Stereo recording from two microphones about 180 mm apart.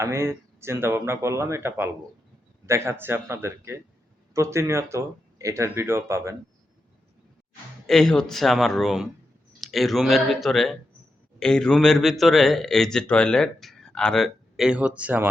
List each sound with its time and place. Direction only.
0.0 s speech: 15° right (ahead or behind)
7.9 s speech: centre (ahead or behind)